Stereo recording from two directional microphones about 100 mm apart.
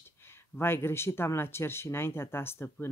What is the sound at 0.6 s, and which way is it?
Speech, 25° left (ahead or behind).